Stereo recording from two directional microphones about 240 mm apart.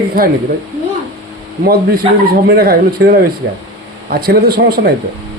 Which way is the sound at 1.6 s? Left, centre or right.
Right.